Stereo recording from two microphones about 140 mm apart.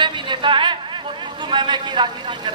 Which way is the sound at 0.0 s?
35° right (ahead or behind).